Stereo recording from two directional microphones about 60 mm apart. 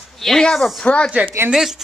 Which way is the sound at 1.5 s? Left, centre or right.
Centre.